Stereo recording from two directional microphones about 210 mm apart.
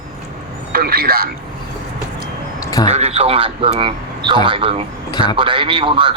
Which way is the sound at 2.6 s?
15° left (ahead or behind).